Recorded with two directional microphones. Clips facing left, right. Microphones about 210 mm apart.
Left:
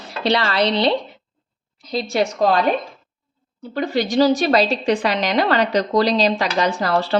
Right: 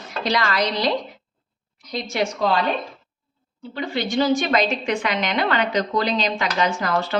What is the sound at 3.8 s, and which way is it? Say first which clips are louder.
A woman's voice: left 5 dB; 40° left (ahead or behind).